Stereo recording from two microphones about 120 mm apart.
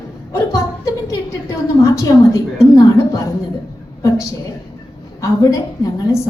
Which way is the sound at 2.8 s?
30° left (ahead or behind).